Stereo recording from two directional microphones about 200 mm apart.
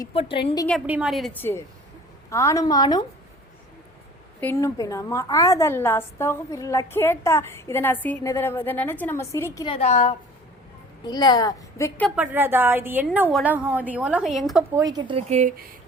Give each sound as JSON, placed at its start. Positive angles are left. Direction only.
{"t": 0.0, "sound": "a woman's voice", "side_deg": 25}
{"t": 0.9, "sound": "a woman's voice", "side_deg": -5}
{"t": 4.4, "sound": "a woman's voice", "side_deg": 10}
{"t": 9.7, "sound": "a woman's voice", "side_deg": 35}
{"t": 11.0, "sound": "a woman's voice", "side_deg": 20}
{"t": 12.1, "sound": "a woman's voice", "side_deg": -10}
{"t": 14.8, "sound": "speech", "side_deg": -20}